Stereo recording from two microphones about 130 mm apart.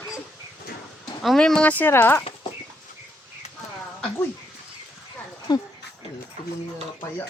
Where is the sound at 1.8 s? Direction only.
15° left (ahead or behind).